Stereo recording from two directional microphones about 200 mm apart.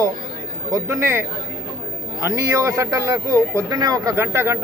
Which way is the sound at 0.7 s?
15° right (ahead or behind).